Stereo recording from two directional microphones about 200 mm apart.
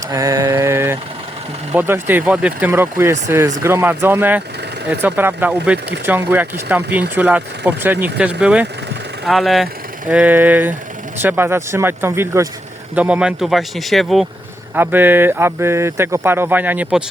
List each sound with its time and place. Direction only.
0.1 s mantra: 15° right (ahead or behind)
1.7 s speech: 10° right (ahead or behind)
14.8 s speech: 10° right (ahead or behind)